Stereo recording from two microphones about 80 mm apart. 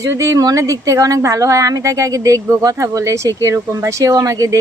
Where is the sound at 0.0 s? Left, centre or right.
Right.